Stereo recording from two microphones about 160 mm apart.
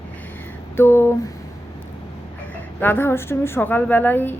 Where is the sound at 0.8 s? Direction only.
15° left (ahead or behind).